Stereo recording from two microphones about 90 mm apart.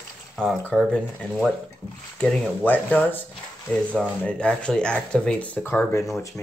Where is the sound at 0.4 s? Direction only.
5° left (ahead or behind).